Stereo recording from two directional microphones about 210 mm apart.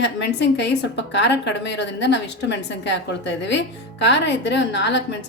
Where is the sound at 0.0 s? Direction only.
55° left (ahead or behind).